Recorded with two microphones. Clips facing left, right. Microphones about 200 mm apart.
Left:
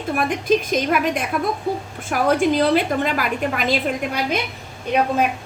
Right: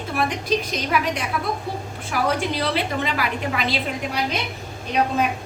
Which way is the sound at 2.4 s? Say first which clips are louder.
Left 7 dB; 50° left (ahead or behind).